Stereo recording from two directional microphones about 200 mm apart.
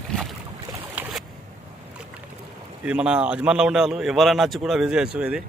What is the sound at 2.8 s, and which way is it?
A man's voice, 5° right (ahead or behind).